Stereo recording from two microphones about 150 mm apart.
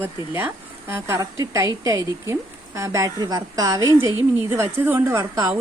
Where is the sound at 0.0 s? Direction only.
15° right (ahead or behind).